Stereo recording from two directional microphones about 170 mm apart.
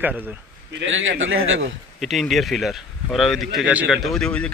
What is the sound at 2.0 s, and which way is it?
Speech, centre (ahead or behind).